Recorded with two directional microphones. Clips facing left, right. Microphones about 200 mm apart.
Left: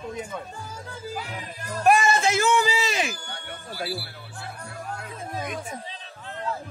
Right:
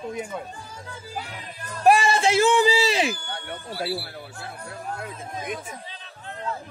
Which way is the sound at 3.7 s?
25° right (ahead or behind).